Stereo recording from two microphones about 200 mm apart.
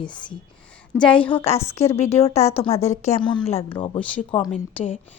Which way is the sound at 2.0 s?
30° left (ahead or behind).